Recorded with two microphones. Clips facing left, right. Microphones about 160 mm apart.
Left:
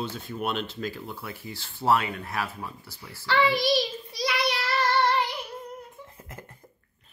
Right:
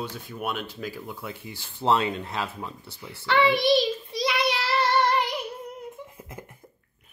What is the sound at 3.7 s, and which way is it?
Child singing, 25° right (ahead or behind).